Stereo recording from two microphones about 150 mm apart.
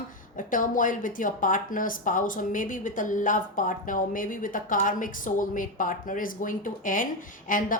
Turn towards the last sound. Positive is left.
turn(degrees=65)  # may be behind; listen again after turning